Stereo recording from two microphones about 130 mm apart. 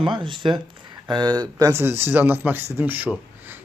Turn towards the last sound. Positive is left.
turn(degrees=-15)  # may be behind; listen again after turning